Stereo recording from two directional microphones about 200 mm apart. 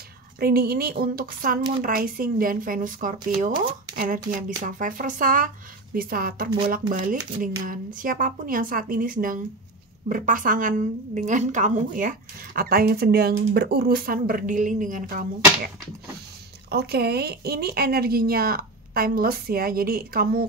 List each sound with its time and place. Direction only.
0.4 s a woman's voice: 50° right (ahead or behind)
16.7 s speech: 55° right (ahead or behind)